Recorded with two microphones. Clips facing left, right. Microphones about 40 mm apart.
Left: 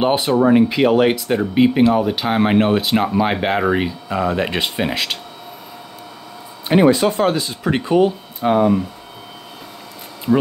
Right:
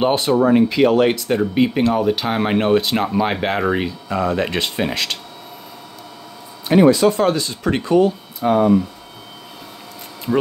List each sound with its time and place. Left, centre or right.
0.0 s speech: centre
6.7 s speech: centre